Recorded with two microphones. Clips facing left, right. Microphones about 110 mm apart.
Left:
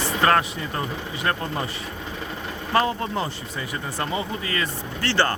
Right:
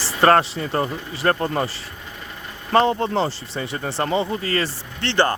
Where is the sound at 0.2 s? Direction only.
35° right (ahead or behind).